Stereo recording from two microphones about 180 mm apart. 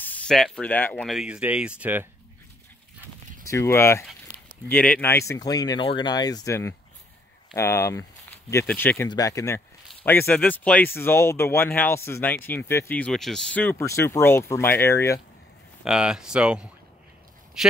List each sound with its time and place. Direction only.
0.0 s speech: 5° left (ahead or behind); by 2.0 s 10° right (ahead or behind)
3.4 s speech: 15° left (ahead or behind)
15.8 s speech: 5° right (ahead or behind)